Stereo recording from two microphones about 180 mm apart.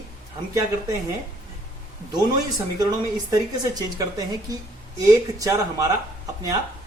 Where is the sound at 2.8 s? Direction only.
20° right (ahead or behind).